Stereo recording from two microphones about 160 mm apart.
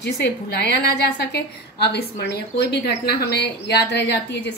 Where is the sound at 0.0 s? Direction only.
90° left.